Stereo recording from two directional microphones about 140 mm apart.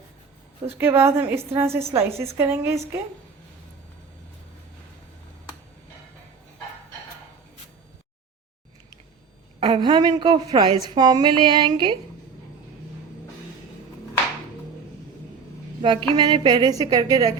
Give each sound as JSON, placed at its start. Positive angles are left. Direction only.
{"t": 0.8, "sound": "a woman's voice", "side_deg": -15}
{"t": 9.6, "sound": "a woman's voice", "side_deg": -35}
{"t": 15.8, "sound": "a woman's voice", "side_deg": -35}